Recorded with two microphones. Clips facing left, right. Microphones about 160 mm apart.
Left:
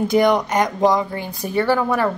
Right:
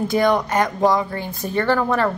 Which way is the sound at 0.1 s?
20° left (ahead or behind).